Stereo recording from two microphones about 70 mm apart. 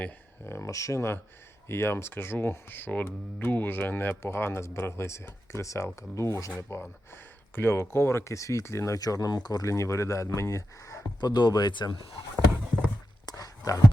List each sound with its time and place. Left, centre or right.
0.4 s speech: left
1.6 s speech: left
9.0 s speech: left
9.6 s speech: left
11.2 s speech: left
13.2 s a sound: left